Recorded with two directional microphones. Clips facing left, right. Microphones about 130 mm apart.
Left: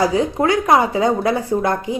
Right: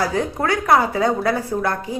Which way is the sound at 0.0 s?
15° left (ahead or behind).